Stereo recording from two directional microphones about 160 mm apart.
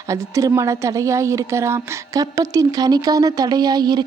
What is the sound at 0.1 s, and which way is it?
A woman's voice, 20° right (ahead or behind).